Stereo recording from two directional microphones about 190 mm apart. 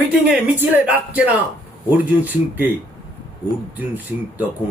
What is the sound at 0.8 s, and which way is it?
A man's voice, 10° right (ahead or behind).